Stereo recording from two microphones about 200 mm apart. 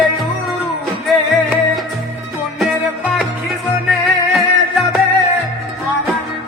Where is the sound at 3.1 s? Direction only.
Centre (ahead or behind).